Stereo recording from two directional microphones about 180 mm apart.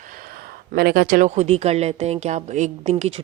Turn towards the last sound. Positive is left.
turn(degrees=-35)  # may be behind; listen again after turning